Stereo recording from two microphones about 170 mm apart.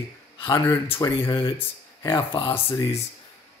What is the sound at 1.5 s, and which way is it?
Speech, 15° left (ahead or behind).